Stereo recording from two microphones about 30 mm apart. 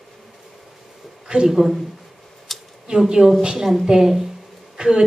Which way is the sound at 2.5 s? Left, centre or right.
Centre.